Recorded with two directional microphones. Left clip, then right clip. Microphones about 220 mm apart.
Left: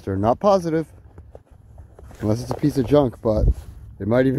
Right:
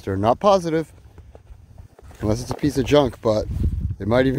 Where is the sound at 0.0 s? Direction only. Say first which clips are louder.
Right 1 dB; centre (ahead or behind).